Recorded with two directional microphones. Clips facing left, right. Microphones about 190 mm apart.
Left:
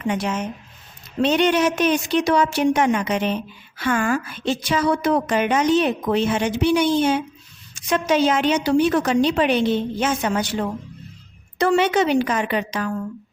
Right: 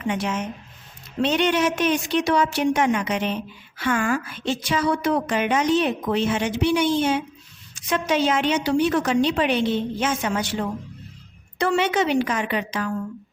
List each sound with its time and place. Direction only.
0.1 s a woman's voice: 40° left (ahead or behind)
11.5 s a woman's voice: 40° left (ahead or behind)